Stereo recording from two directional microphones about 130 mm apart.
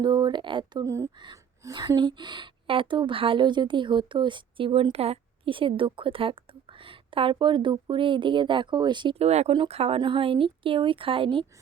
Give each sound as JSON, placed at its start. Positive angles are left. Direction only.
{"t": 0.0, "sound": "a woman's voice", "side_deg": -35}
{"t": 0.9, "sound": "speech", "side_deg": -20}
{"t": 1.1, "sound": "a woman's voice", "side_deg": -35}